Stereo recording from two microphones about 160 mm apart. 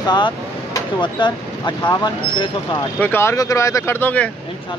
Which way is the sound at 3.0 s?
15° left (ahead or behind).